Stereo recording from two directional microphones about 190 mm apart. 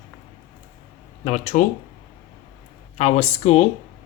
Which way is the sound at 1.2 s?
35° left (ahead or behind).